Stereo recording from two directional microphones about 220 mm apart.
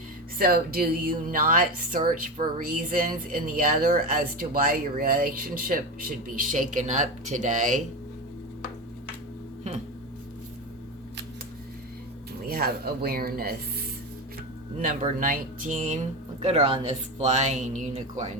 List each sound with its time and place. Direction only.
0.3 s speech: 45° right (ahead or behind)
12.5 s speech: 45° right (ahead or behind)
14.8 s speech: 35° right (ahead or behind)